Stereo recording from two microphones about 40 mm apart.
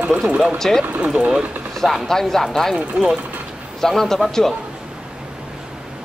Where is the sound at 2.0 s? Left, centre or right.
Centre.